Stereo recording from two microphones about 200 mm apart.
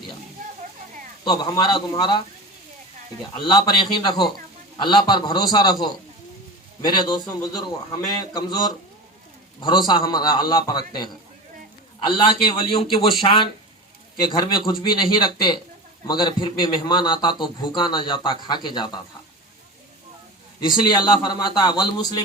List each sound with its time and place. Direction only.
1.2 s a man's voice: 20° left (ahead or behind)
3.4 s a man's voice: 20° left (ahead or behind)
6.8 s a man's voice: 20° left (ahead or behind)
20.6 s a man's voice: 20° left (ahead or behind)